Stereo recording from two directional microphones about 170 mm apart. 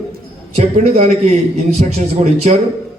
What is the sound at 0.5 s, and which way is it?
A man's voice, 40° right (ahead or behind).